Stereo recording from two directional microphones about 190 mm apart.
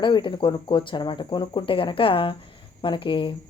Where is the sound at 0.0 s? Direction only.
25° left (ahead or behind).